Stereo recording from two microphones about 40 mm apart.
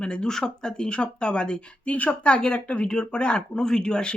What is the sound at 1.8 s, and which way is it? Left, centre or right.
A woman's voice, left.